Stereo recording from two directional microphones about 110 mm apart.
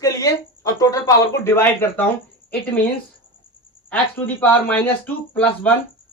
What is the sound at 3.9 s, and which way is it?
Speech, 10° left (ahead or behind).